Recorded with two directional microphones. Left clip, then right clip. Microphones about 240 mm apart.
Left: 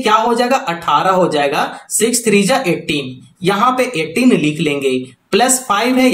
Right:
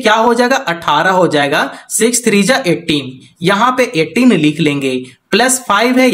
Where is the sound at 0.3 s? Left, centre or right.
Right.